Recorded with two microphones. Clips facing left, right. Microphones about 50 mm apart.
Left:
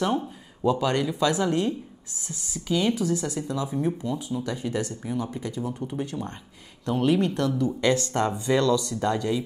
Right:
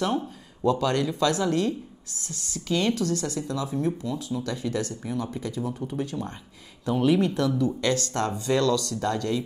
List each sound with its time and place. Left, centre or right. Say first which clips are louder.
0.0 s speech: left 1 dB; centre
7.8 s speech: left 2 dB; left